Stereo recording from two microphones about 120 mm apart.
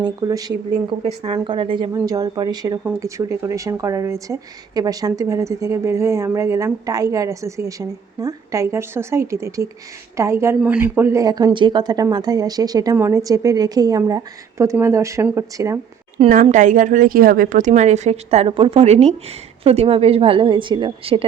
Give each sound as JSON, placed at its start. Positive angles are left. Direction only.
{"t": 0.0, "sound": "speech", "side_deg": -30}
{"t": 1.0, "sound": "a woman's voice", "side_deg": -45}
{"t": 2.0, "sound": "speech", "side_deg": -30}
{"t": 16.1, "sound": "a woman's voice", "side_deg": -80}